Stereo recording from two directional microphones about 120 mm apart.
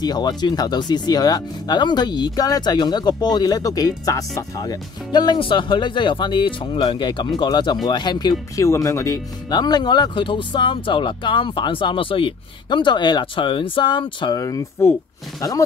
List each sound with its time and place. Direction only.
0.0 s speech: 35° left (ahead or behind)
14.4 s speech: 30° left (ahead or behind)